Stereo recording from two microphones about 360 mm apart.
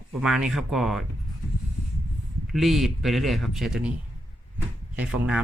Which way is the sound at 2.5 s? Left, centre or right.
Centre.